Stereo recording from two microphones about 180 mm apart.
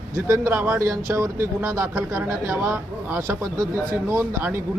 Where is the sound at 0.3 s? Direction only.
10° right (ahead or behind).